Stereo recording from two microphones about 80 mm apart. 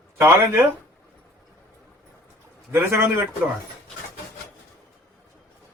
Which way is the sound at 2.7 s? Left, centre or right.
Right.